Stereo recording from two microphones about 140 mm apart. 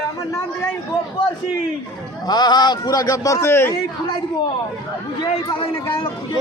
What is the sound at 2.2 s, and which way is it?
A man's voice, 30° left (ahead or behind).